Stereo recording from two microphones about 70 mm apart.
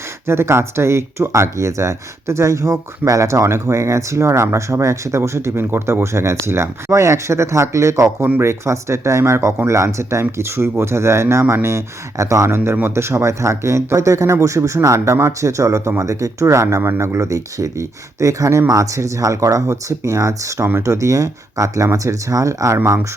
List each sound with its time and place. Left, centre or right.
0.3 s speech: right
17.2 s speech: right